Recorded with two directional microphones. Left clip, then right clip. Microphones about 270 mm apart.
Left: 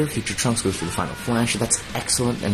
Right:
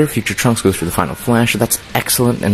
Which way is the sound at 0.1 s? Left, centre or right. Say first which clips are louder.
Right 8 dB; right.